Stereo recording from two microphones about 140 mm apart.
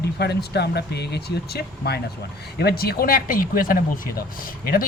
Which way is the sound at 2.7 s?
90° left.